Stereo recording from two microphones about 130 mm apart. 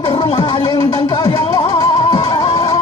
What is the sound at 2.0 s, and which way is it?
Music, 45° left (ahead or behind).